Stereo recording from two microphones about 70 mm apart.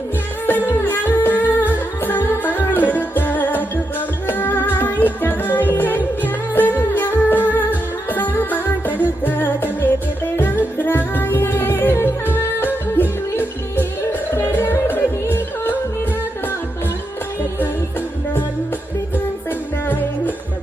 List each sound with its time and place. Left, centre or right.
0.4 s music: left
19.1 s music: left